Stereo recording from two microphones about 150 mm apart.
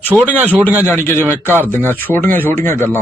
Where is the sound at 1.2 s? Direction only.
15° right (ahead or behind).